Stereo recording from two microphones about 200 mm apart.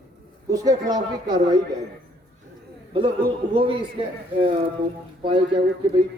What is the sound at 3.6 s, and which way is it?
Speech, 25° right (ahead or behind).